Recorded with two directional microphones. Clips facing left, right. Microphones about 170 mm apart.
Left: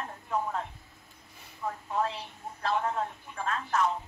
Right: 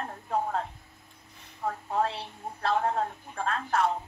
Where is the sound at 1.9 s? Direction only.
35° right (ahead or behind).